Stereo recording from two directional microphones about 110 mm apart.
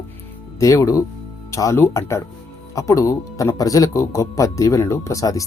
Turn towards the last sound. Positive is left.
turn(degrees=30)  # may be behind; listen again after turning